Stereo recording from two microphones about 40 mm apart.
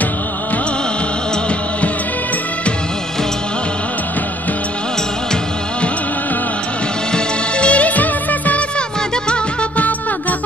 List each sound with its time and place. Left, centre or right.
7.1 s music of bollywood: left
8.7 s music: left